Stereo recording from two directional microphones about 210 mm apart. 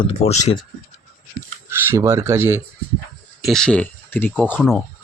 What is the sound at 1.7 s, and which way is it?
Speech, 10° right (ahead or behind).